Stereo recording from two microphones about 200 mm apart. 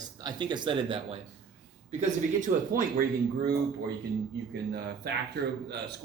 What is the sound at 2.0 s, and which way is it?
Speech, 40° right (ahead or behind).